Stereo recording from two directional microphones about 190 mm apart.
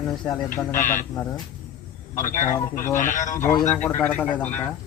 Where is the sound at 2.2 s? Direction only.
45° left (ahead or behind).